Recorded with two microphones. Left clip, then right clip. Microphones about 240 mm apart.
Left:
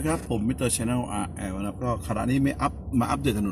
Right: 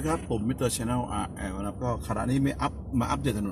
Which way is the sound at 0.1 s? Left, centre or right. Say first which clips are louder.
Left 1 dB; centre.